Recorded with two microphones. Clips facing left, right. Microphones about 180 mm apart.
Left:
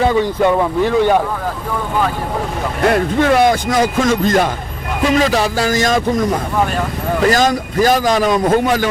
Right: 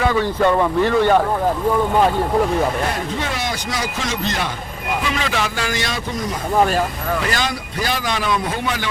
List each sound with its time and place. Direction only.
0.0 s speech: 20° left (ahead or behind)
2.9 s a man's voice: 55° left (ahead or behind)
7.3 s a man's voice: 45° left (ahead or behind)